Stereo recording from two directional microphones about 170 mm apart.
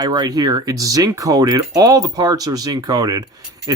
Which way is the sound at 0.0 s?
25° right (ahead or behind).